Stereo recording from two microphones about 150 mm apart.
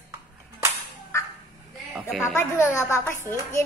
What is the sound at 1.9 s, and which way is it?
Speech, 5° right (ahead or behind).